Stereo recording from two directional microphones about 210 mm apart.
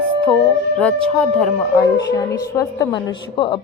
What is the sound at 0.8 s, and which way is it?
A woman's voice, 5° left (ahead or behind).